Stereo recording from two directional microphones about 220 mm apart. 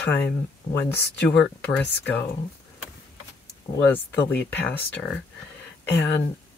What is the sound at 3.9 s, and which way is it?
Speech, 10° left (ahead or behind).